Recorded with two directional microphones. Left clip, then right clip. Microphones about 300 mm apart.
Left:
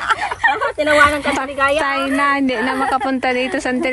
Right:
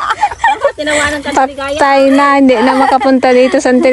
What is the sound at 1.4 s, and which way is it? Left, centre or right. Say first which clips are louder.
A woman's voice: right 5 dB; centre.